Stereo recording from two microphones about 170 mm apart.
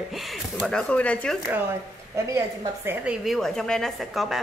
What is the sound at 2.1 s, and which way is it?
A woman's voice, 20° right (ahead or behind).